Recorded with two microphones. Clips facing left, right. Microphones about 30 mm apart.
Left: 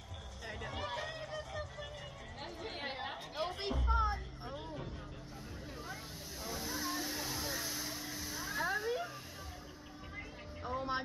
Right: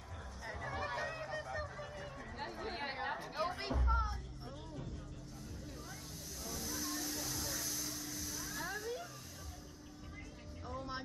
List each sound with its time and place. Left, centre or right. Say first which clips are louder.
0.5 s vehicle: even; left
2.9 s chatter: right 2 dB; centre
3.9 s music: left 6 dB; left
4.5 s vehicle: left 4 dB; left
6.4 s vehicle: left 3 dB; left
10.1 s music: left 7 dB; left